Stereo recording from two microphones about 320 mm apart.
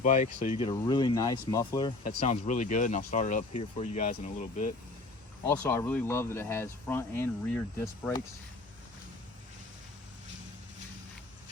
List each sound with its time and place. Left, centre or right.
0.0 s speech: left
5.5 s speech: centre